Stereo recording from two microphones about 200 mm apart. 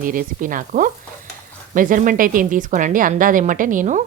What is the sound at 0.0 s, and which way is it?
Speech, 40° right (ahead or behind).